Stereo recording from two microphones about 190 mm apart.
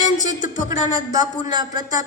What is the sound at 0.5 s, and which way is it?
A woman's voice, 20° right (ahead or behind).